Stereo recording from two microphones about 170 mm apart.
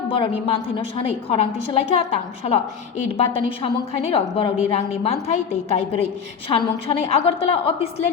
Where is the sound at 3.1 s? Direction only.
35° left (ahead or behind).